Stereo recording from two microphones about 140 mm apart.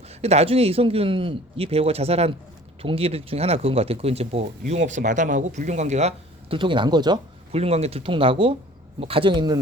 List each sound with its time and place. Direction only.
0.1 s speech: 50° right (ahead or behind)
6.6 s speech: 35° right (ahead or behind)
7.5 s speech: 45° right (ahead or behind); by 9.6 s 30° right (ahead or behind)